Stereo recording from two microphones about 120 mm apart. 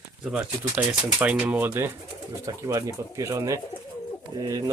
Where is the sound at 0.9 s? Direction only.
10° right (ahead or behind); by 4.7 s 25° right (ahead or behind).